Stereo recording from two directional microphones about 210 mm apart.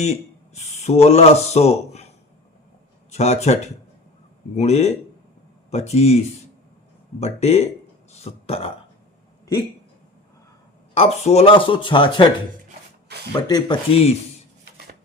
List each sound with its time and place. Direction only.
0.0 s speech: 30° left (ahead or behind)
3.1 s speech: 30° left (ahead or behind)
10.9 s speech: 30° left (ahead or behind)
13.1 s a sound: 50° right (ahead or behind)
13.5 s speech: 25° left (ahead or behind)